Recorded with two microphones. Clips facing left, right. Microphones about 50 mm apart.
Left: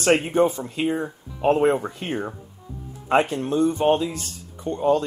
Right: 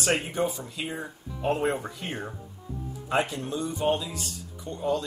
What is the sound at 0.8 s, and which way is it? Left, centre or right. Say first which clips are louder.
Speech: left 11 dB; left.